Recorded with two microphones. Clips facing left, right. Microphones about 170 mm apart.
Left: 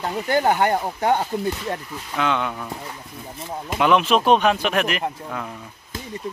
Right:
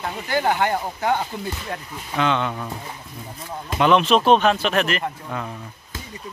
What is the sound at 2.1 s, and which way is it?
Speech, 5° left (ahead or behind).